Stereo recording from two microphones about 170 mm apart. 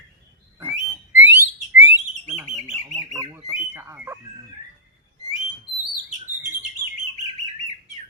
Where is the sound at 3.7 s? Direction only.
15° right (ahead or behind).